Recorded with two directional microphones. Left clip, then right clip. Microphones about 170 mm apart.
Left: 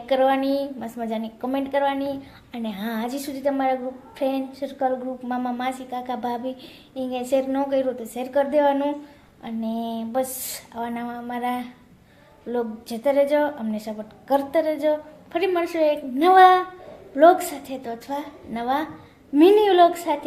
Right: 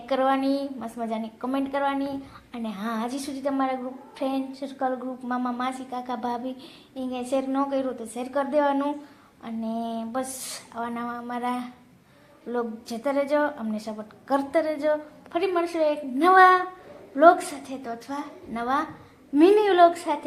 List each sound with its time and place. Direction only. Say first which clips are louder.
0.1 s a woman's voice: left 4 dB; 15° left (ahead or behind)